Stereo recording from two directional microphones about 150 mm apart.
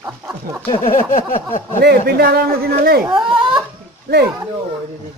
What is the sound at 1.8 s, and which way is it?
A man's voice, 90° right.